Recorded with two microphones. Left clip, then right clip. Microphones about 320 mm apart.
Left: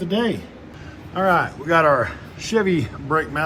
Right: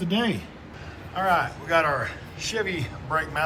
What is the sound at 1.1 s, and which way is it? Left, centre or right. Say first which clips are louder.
A man's voice: left 5 dB; centre.